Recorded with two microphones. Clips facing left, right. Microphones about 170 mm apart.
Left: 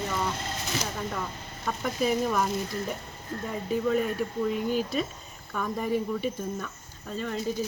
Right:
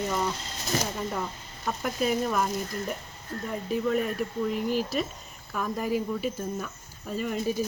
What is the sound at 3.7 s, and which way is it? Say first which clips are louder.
Speech: left 1 dB; centre (ahead or behind).